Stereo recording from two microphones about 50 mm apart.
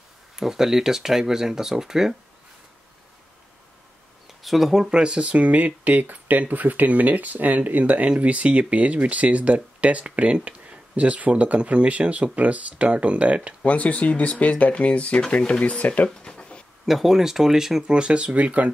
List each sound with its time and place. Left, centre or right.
0.4 s speech: centre
4.3 s speech: centre
4.9 s speech: centre
13.6 s speech: left
16.2 s a sound: centre
16.8 s speech: centre; by 18.7 s right